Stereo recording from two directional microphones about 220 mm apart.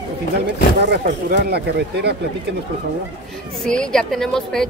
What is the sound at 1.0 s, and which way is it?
Speech, 45° right (ahead or behind).